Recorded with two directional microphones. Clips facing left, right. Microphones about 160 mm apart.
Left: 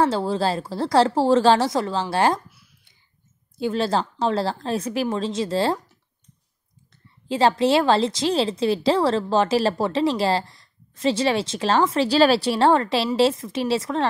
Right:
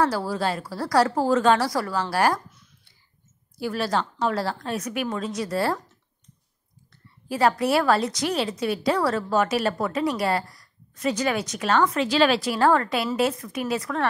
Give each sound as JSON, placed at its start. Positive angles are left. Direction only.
{"t": 0.0, "sound": "a woman's voice", "side_deg": 25}
{"t": 3.5, "sound": "a woman's voice", "side_deg": 25}
{"t": 7.2, "sound": "a woman's voice", "side_deg": 25}